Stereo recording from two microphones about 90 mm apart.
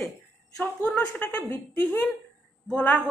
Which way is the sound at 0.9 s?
20° left (ahead or behind).